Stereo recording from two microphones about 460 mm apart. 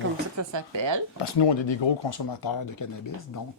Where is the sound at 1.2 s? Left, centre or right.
Left.